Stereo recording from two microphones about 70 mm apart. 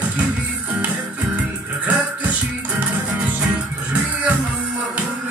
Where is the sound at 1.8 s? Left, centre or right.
Right.